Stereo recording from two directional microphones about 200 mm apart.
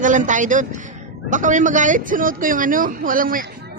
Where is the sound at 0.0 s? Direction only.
40° right (ahead or behind).